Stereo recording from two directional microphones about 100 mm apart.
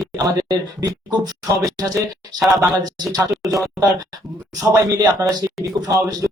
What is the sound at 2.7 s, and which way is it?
Speech, 40° right (ahead or behind).